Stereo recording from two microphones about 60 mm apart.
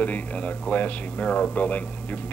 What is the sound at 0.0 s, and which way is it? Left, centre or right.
Speech, left.